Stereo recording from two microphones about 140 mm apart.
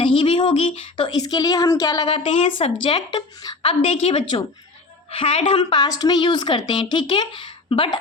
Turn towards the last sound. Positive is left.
turn(degrees=35)  # may be behind; listen again after turning